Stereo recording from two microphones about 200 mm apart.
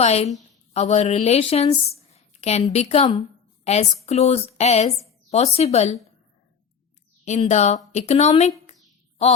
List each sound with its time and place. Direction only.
0.0 s a woman's voice: 30° left (ahead or behind)
7.3 s a woman's voice: 35° left (ahead or behind)